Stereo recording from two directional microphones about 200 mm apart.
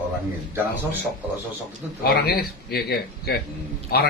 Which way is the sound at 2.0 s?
50° left (ahead or behind).